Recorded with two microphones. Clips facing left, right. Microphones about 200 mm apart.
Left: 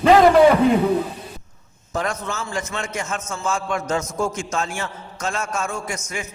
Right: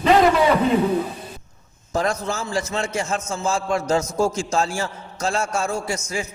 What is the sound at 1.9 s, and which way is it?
A man's voice, 35° right (ahead or behind).